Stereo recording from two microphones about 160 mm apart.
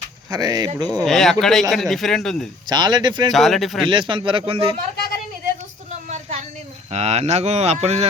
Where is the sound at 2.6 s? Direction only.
25° right (ahead or behind).